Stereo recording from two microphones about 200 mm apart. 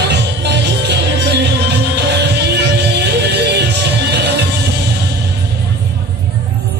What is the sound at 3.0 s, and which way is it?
Music, 55° right (ahead or behind).